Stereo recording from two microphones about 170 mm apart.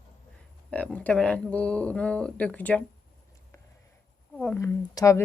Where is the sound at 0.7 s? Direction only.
5° left (ahead or behind).